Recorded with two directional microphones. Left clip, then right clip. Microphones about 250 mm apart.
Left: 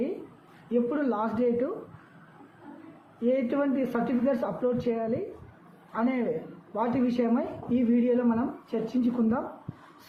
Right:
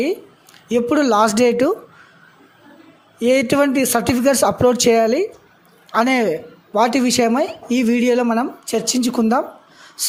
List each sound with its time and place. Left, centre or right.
0.7 s speech: right
3.2 s speech: right